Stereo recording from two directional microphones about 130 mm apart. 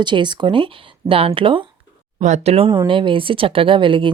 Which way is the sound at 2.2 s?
60° right (ahead or behind).